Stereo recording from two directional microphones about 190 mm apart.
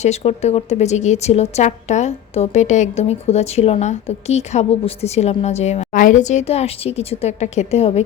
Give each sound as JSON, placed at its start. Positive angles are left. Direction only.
{"t": 0.0, "sound": "a woman's voice", "side_deg": 35}